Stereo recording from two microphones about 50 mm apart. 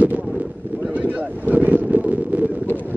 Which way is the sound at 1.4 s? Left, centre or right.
Right.